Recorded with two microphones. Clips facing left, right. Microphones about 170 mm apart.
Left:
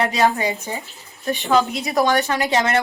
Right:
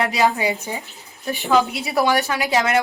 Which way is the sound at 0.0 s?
Centre (ahead or behind).